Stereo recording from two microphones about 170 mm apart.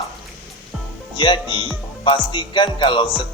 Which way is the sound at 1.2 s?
30° left (ahead or behind).